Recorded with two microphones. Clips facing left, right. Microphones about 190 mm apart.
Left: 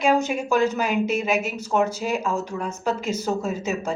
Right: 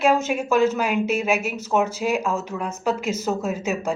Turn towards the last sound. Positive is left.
turn(degrees=-10)  # may be behind; listen again after turning